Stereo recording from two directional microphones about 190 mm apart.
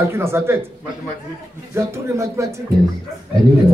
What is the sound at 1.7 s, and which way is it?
Speech, 15° right (ahead or behind).